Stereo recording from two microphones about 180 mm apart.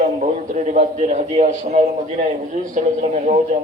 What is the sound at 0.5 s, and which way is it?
A man's voice, 45° right (ahead or behind).